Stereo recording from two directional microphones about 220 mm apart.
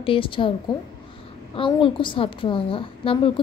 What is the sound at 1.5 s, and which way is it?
A woman's voice, 20° left (ahead or behind).